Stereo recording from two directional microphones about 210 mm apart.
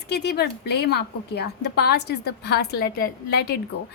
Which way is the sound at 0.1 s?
50° left (ahead or behind).